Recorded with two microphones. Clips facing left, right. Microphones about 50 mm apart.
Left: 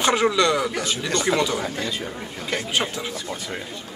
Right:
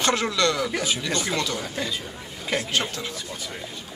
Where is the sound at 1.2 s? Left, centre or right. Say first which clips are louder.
Left 5 dB; centre.